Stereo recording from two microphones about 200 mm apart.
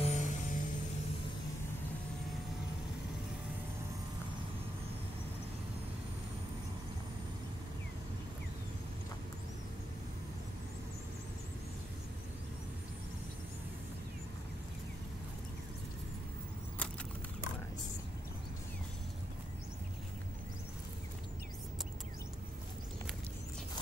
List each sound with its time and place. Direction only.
0.0 s music: 40° left (ahead or behind)